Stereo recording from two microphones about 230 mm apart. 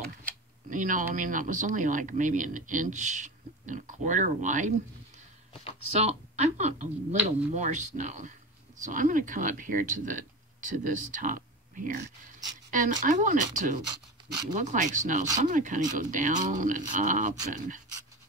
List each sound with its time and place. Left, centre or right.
0.7 s speech: right
5.5 s a sound: left
5.9 s speech: right